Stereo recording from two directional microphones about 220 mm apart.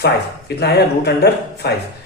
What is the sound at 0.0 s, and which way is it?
A man's voice, 50° left (ahead or behind).